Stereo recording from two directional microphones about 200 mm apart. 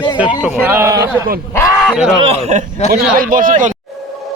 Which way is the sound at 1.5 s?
10° left (ahead or behind).